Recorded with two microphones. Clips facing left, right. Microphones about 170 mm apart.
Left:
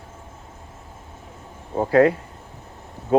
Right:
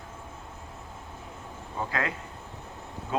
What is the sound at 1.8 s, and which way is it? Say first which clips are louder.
Speech: left 16 dB; 35° left (ahead or behind).